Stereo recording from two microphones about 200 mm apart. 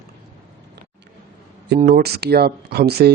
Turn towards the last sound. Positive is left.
turn(degrees=-55)  # may be behind; listen again after turning